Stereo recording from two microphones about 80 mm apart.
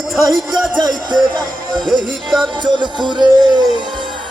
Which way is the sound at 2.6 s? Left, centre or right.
Right.